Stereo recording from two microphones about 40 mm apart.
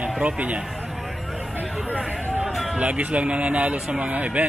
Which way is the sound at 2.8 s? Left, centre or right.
Right.